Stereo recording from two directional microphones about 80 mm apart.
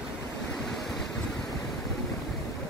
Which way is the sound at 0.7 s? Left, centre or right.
Centre.